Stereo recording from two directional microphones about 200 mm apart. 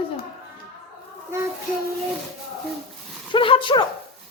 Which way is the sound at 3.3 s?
25° left (ahead or behind).